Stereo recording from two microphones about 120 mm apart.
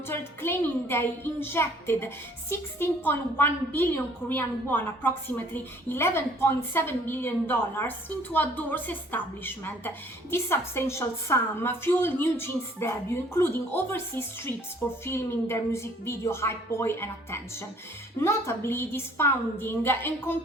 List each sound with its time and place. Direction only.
0.1 s a woman's voice: 20° left (ahead or behind)